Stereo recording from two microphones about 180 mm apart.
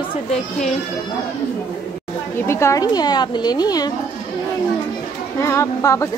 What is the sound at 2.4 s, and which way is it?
Speech, 15° left (ahead or behind).